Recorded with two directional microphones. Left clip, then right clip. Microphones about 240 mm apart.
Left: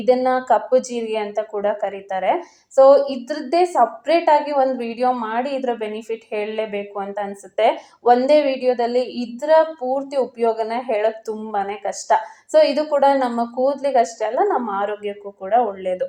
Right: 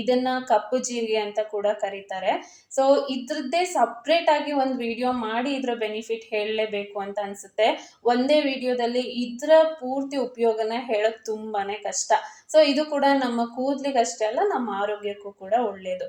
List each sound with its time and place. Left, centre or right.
0.0 s speech: centre